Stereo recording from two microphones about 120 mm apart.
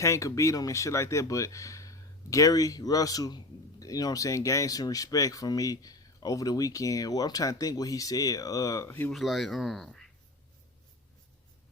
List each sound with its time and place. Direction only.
0.0 s speech: 25° left (ahead or behind)
8.9 s speech: 15° left (ahead or behind)
9.1 s speech: centre (ahead or behind)